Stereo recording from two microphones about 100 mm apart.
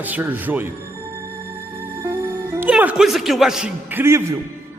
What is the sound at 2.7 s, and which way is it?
Speech, 5° right (ahead or behind).